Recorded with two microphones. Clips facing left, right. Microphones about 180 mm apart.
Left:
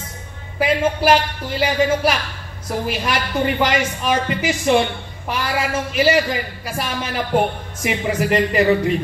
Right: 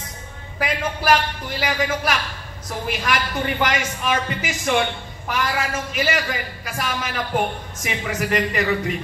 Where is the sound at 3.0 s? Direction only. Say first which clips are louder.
Left 2 dB; 30° left (ahead or behind).